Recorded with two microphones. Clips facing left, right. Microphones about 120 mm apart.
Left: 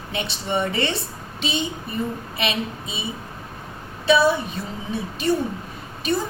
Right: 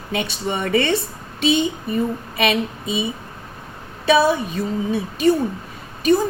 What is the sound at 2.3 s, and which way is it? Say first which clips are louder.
Speech: right 7 dB; 55° right (ahead or behind).